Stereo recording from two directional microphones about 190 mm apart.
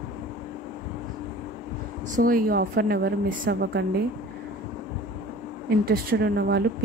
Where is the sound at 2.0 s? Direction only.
45° right (ahead or behind).